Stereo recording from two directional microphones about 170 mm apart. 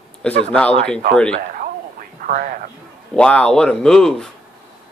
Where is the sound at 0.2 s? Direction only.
5° left (ahead or behind).